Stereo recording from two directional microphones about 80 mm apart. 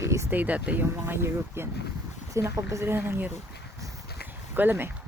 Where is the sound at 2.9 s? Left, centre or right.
Right.